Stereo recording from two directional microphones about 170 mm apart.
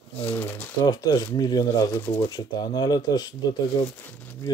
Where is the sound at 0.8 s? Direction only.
25° left (ahead or behind).